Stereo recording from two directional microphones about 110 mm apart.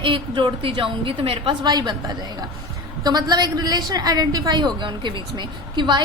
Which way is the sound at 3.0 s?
35° right (ahead or behind).